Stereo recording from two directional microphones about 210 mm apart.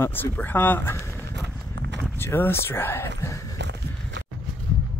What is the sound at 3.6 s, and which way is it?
Walk, 55° right (ahead or behind).